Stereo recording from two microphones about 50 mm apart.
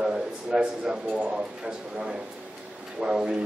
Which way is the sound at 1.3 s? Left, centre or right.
Centre.